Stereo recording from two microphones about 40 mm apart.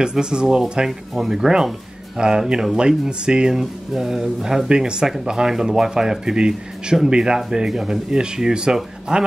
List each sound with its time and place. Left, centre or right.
0.0 s speech: right
4.6 s speech: right